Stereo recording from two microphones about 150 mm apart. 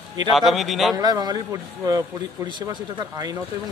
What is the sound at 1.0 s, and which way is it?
Speech, 25° right (ahead or behind).